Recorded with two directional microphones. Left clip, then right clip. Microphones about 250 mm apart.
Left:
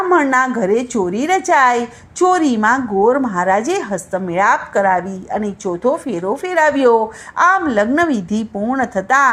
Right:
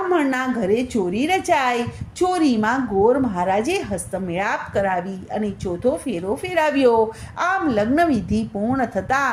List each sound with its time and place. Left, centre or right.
0.1 s a woman's voice: centre